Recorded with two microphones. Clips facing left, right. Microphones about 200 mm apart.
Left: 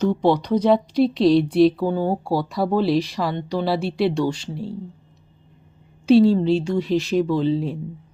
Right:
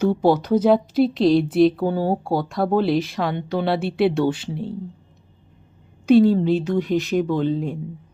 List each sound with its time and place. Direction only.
0.0 s speech: 5° right (ahead or behind)
6.1 s speech: centre (ahead or behind)